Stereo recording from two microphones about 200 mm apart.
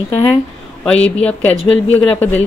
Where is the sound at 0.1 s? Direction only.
30° left (ahead or behind).